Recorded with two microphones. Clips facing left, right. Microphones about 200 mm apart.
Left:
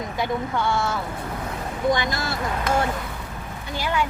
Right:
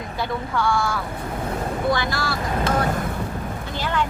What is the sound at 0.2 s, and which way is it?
Speech, 20° left (ahead or behind).